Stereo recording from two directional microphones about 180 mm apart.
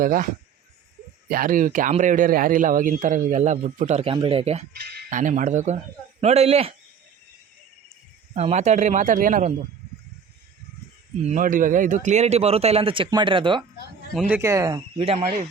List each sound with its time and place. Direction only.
0.0 s a man's voice: 50° right (ahead or behind)
1.3 s a man's voice: 50° right (ahead or behind); by 4.6 s 35° right (ahead or behind)
4.9 s a man's voice: 50° right (ahead or behind)
8.4 s a man's voice: 40° right (ahead or behind)
11.3 s a man's voice: 45° right (ahead or behind); by 13.7 s 25° right (ahead or behind)
14.3 s speech: 15° right (ahead or behind); by 15.4 s 40° right (ahead or behind)